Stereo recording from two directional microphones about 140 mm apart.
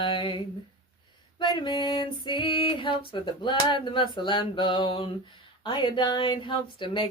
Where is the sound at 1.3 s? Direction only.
35° left (ahead or behind).